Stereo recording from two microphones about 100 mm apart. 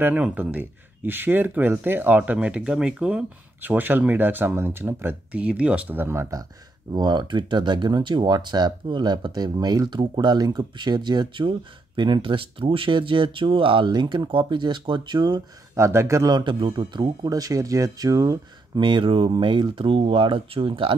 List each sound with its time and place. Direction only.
0.0 s speech: 15° right (ahead or behind)
6.9 s speech: 45° right (ahead or behind)
15.7 s speech: 30° right (ahead or behind)
16.3 s speech: 50° right (ahead or behind)
18.8 s speech: 55° right (ahead or behind)